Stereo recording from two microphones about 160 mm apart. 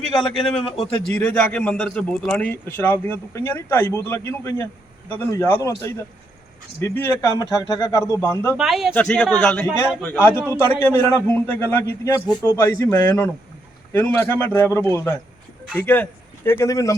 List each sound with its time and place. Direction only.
0.2 s a man's voice: 5° left (ahead or behind)
6.7 s a man's voice: 15° left (ahead or behind)
8.5 s a man's voice: centre (ahead or behind); by 16.9 s 20° left (ahead or behind)